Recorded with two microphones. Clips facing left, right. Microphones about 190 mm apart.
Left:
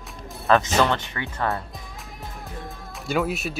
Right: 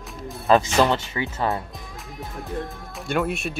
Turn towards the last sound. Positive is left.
turn(degrees=0)  # may be behind; listen again after turning